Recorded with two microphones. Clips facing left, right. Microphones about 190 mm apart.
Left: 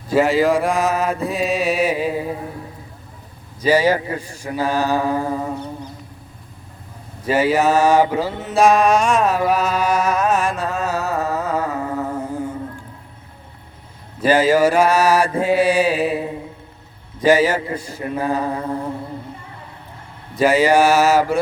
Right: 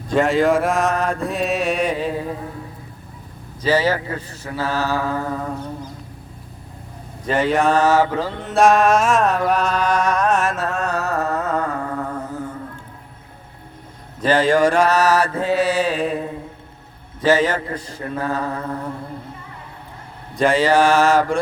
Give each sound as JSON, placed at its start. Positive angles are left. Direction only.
{"t": 0.1, "sound": "mantra", "side_deg": 5}
{"t": 3.6, "sound": "mantra", "side_deg": 15}
{"t": 7.3, "sound": "mantra", "side_deg": 5}
{"t": 14.2, "sound": "mantra", "side_deg": 10}
{"t": 20.3, "sound": "mantra", "side_deg": 5}